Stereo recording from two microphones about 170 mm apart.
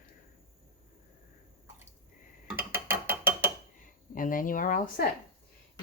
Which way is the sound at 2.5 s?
10° right (ahead or behind).